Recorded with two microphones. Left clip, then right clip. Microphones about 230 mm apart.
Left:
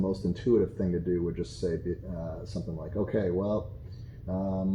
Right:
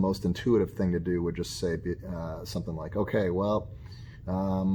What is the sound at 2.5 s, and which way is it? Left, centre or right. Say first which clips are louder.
Speech: right 2 dB; right.